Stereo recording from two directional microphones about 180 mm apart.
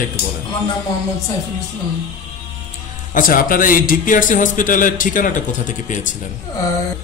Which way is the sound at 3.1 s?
50° left (ahead or behind).